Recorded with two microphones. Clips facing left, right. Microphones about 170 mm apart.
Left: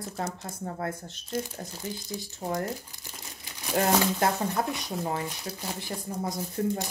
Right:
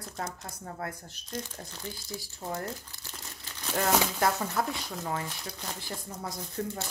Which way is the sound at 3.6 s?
15° left (ahead or behind).